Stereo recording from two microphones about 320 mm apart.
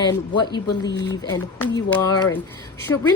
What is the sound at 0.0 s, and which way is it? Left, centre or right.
Speech, centre.